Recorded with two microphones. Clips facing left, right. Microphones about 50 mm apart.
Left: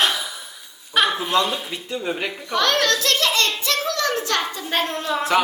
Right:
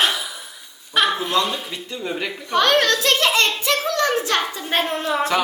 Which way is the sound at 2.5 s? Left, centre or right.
Right.